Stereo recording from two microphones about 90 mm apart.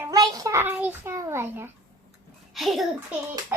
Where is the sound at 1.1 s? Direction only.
30° right (ahead or behind).